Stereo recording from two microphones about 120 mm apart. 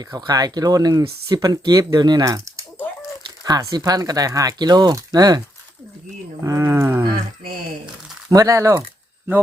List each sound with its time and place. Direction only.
0.0 s speech: 35° right (ahead or behind)
6.4 s speech: 25° right (ahead or behind)
8.3 s speech: 30° right (ahead or behind)